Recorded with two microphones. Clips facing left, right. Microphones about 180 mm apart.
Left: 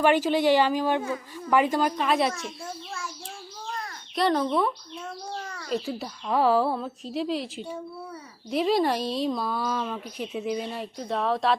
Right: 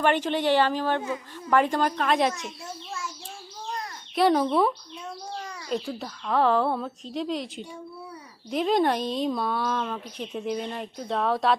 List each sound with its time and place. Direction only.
0.0 s a woman's voice: 10° left (ahead or behind)
4.1 s speech: 5° right (ahead or behind)
5.6 s speech: centre (ahead or behind)